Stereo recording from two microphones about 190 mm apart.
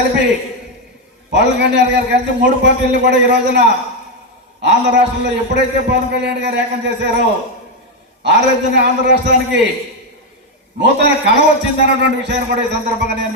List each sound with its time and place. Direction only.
1.3 s a man's voice: 65° right (ahead or behind)
10.8 s a man's voice: 65° right (ahead or behind)